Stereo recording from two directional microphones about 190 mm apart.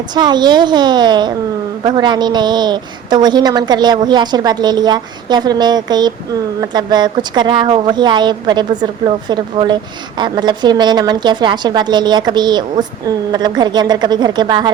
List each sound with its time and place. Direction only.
0.1 s a woman's voice: 25° right (ahead or behind)